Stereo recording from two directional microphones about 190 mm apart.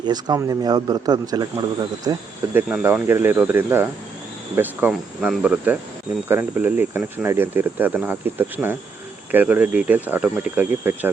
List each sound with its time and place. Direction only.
0.0 s speech: 20° right (ahead or behind)